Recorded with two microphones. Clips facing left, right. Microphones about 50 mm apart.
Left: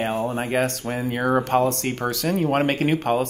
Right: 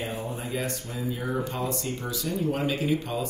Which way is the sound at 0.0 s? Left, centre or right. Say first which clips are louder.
Left 9 dB; left.